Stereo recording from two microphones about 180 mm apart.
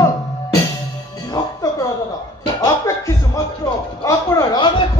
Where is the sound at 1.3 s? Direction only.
20° left (ahead or behind).